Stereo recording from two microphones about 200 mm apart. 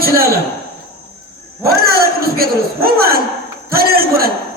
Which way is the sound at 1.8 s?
50° right (ahead or behind).